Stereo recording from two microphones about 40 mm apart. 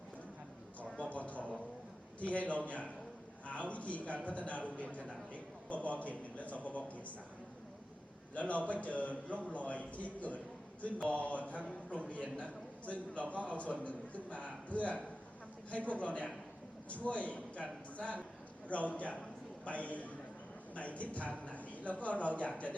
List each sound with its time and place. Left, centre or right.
0.9 s a sound: left
2.5 s a man's voice: left
8.4 s a man's voice: left